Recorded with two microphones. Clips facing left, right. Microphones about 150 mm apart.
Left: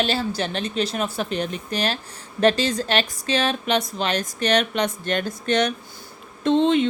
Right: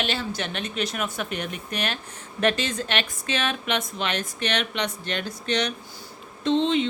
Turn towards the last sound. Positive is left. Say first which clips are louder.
# left 4 dB
turn(degrees=55)  # may be behind; listen again after turning